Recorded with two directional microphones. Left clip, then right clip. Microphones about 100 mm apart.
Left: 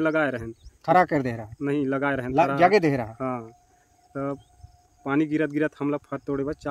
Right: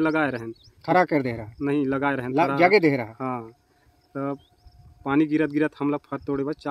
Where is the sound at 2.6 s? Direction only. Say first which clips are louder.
Right 3 dB; 35° left (ahead or behind).